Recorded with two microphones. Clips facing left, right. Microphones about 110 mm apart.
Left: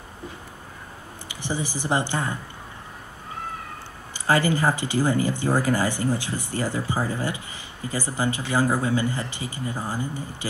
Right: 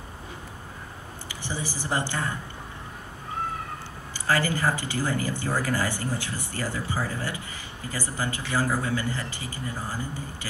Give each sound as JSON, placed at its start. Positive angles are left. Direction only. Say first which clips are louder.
{"t": 1.3, "sound": "speech", "louder": "left 5 dB", "side_deg": 20}
{"t": 4.1, "sound": "speech", "louder": "left 4 dB", "side_deg": 20}